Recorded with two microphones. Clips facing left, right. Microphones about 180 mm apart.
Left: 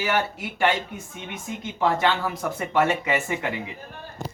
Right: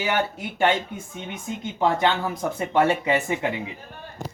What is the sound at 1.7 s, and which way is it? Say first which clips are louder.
Speech: right 1 dB; 20° right (ahead or behind).